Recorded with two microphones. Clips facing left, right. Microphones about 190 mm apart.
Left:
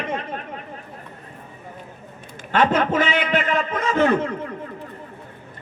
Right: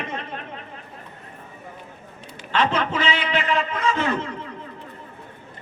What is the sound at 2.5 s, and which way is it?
A man's voice, 50° left (ahead or behind).